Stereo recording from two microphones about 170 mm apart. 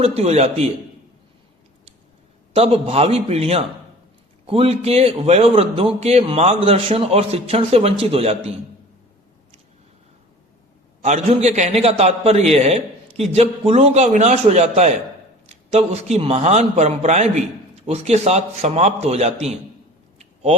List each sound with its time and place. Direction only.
0.0 s a man's voice: 35° right (ahead or behind)
2.6 s a man's voice: 35° right (ahead or behind)
11.0 s a man's voice: 40° right (ahead or behind)